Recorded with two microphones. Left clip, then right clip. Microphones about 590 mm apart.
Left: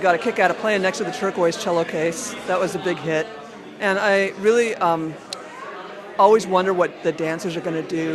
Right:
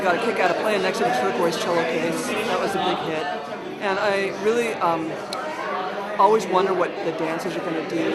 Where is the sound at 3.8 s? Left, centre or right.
Left.